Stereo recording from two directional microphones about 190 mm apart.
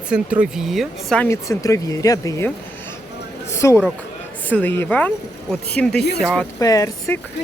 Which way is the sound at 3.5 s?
15° left (ahead or behind).